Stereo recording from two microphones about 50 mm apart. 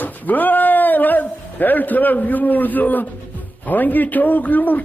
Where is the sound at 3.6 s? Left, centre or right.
Left.